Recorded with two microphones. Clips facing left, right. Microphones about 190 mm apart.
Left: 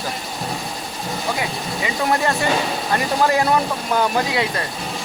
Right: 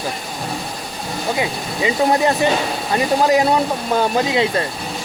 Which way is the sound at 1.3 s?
20° right (ahead or behind).